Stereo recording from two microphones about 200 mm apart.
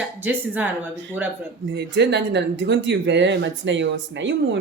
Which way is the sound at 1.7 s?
60° right (ahead or behind).